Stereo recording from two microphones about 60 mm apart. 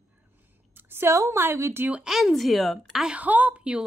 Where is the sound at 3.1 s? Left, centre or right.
Right.